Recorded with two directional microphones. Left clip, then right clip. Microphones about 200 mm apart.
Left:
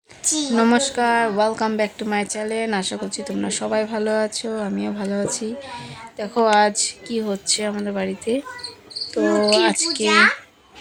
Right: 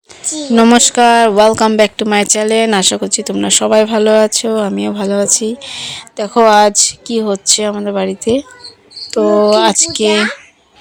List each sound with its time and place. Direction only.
0.5 s speech: 40° right (ahead or behind)